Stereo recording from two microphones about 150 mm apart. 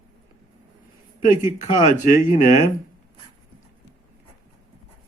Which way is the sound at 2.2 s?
60° left (ahead or behind).